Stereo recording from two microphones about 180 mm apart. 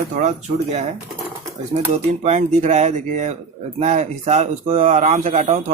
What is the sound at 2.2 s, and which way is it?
Speech, 40° right (ahead or behind).